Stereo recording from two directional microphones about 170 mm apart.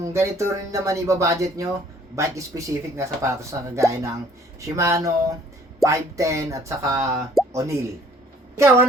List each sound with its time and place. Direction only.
0.0 s speech: 15° right (ahead or behind)